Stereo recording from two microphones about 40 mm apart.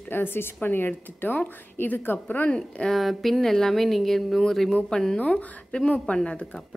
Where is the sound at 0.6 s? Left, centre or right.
Left.